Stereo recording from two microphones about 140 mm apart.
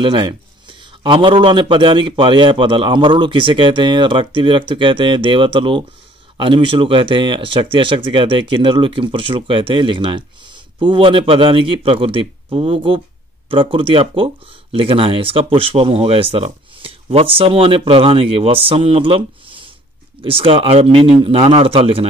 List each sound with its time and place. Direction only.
0.0 s a man's voice: 35° right (ahead or behind)